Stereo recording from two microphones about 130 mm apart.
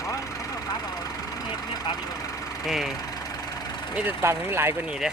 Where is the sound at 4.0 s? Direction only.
15° right (ahead or behind).